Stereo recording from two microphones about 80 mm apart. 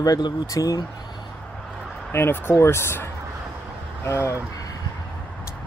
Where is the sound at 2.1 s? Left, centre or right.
Left.